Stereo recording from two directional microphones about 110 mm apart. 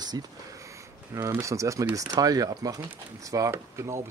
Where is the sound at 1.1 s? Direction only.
25° right (ahead or behind).